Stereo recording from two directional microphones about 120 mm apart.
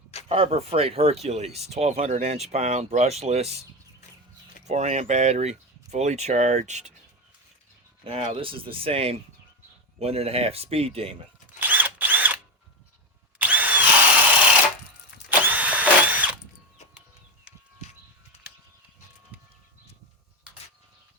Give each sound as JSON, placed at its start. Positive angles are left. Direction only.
{"t": 0.3, "sound": "speech", "side_deg": -55}
{"t": 4.6, "sound": "speech", "side_deg": -70}
{"t": 8.0, "sound": "speech", "side_deg": -50}
{"t": 11.6, "sound": "drill", "side_deg": -15}
{"t": 13.4, "sound": "drill", "side_deg": -15}
{"t": 15.3, "sound": "drill", "side_deg": -15}